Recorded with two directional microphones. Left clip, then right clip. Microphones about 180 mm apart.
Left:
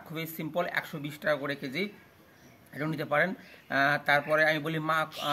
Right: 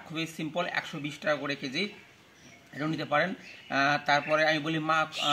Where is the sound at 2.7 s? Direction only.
20° left (ahead or behind).